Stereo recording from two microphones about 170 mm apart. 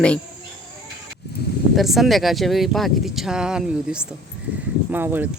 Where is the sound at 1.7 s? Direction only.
Centre (ahead or behind).